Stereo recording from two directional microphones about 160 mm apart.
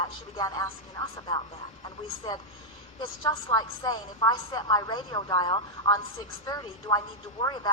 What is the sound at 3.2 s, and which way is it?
A woman's voice, 25° left (ahead or behind).